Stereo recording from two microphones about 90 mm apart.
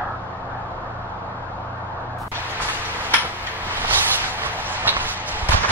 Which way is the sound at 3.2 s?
20° right (ahead or behind).